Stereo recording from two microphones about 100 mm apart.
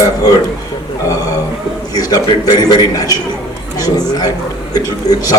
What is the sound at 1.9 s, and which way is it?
A woman's voice, 40° left (ahead or behind).